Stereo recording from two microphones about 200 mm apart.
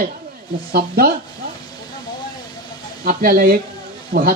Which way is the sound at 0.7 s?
50° right (ahead or behind).